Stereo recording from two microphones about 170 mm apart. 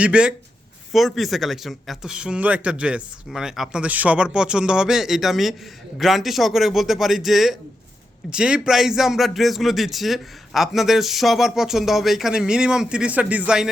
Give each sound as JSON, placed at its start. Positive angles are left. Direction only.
{"t": 0.0, "sound": "speech", "side_deg": -5}